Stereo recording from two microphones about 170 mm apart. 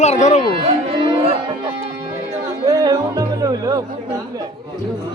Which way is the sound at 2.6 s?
20° right (ahead or behind).